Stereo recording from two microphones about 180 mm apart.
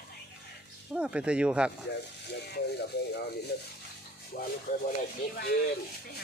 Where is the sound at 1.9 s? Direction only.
70° left (ahead or behind).